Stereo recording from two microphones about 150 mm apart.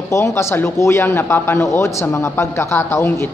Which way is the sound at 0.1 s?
20° left (ahead or behind).